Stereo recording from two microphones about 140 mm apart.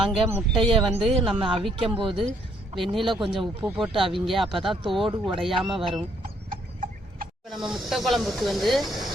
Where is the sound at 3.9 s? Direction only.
40° right (ahead or behind).